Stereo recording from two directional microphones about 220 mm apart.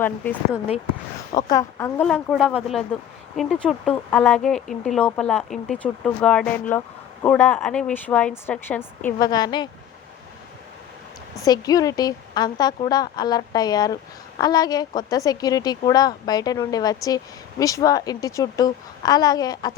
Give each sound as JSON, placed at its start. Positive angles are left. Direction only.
{"t": 1.3, "sound": "a woman's voice", "side_deg": 20}
{"t": 2.0, "sound": "speech", "side_deg": 0}
{"t": 11.4, "sound": "a woman's voice", "side_deg": 15}